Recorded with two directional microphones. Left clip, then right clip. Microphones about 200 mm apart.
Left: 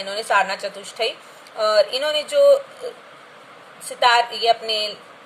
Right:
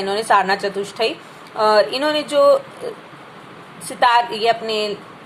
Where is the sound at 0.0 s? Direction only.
Centre (ahead or behind).